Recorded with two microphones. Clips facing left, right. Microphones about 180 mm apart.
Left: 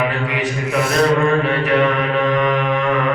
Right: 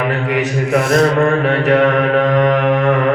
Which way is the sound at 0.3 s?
45° right (ahead or behind).